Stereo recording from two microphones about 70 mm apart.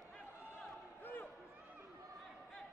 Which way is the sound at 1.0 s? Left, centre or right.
Left.